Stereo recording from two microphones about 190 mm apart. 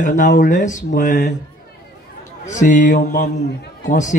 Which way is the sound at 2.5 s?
40° left (ahead or behind).